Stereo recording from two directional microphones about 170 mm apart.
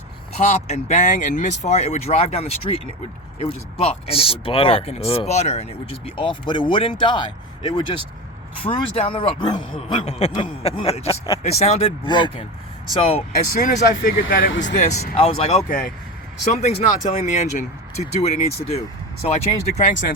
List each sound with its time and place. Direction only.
0.3 s speech: 40° left (ahead or behind)
10.1 s speech: 40° left (ahead or behind)
12.0 s speech: 30° left (ahead or behind)
13.5 s speech: 55° left (ahead or behind)
14.7 s speech: 45° left (ahead or behind)
19.7 s speech: 45° left (ahead or behind)